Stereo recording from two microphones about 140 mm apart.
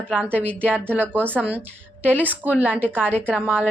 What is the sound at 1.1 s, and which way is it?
A woman's voice, 15° right (ahead or behind).